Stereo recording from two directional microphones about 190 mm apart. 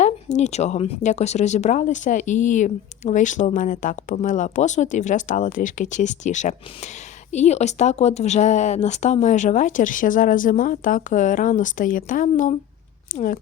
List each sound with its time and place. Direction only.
0.0 s speech: 35° left (ahead or behind)